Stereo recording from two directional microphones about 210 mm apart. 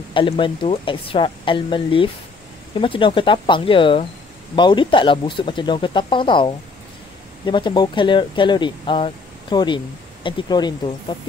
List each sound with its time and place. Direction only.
0.1 s speech: 25° left (ahead or behind)